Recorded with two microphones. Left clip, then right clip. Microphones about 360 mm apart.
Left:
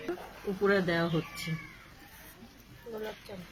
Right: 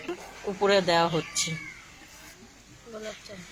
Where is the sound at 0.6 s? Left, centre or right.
Centre.